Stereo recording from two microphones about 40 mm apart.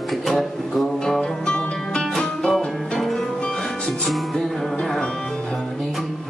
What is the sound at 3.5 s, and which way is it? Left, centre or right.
Music, centre.